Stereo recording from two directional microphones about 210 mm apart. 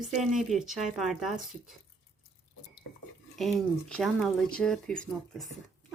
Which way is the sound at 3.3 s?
Centre (ahead or behind).